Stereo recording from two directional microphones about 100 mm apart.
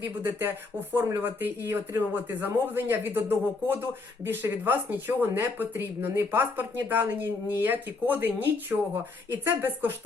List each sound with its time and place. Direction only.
0.0 s speech: 20° right (ahead or behind)